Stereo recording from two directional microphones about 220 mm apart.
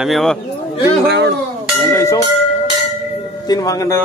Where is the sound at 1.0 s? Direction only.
50° right (ahead or behind).